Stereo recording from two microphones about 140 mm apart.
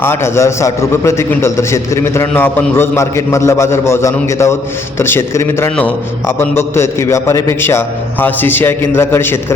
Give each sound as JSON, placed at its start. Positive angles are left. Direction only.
{"t": 0.0, "sound": "a man's voice", "side_deg": 15}